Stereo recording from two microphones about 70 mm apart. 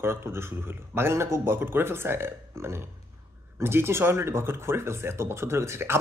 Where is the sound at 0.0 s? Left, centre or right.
Right.